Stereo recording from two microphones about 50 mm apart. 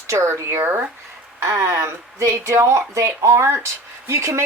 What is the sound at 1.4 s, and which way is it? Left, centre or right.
Speech, right.